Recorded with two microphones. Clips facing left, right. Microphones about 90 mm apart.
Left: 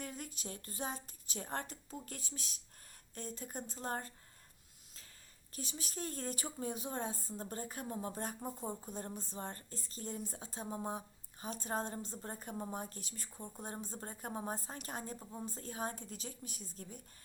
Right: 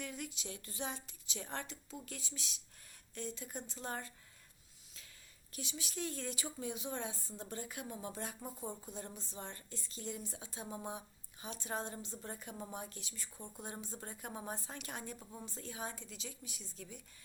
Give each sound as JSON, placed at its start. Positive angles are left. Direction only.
{"t": 0.0, "sound": "a woman's voice", "side_deg": 40}
{"t": 5.5, "sound": "a woman's voice", "side_deg": 40}
{"t": 15.2, "sound": "a woman's voice", "side_deg": 25}
{"t": 15.4, "sound": "a woman's voice", "side_deg": 40}